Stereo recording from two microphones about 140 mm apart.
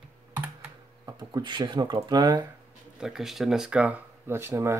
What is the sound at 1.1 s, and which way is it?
Speech, 30° right (ahead or behind).